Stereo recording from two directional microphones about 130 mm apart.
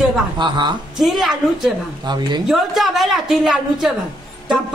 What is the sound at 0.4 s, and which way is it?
Speech, 35° right (ahead or behind).